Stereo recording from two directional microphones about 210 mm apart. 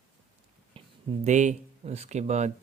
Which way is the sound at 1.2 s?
35° right (ahead or behind).